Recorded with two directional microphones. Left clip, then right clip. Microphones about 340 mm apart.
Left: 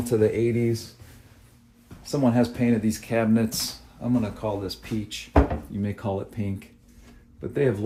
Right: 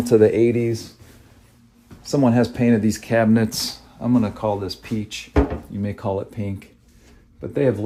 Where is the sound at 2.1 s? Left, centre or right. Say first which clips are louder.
Right 5 dB; right.